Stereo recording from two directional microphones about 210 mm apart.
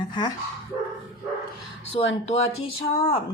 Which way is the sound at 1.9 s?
30° left (ahead or behind).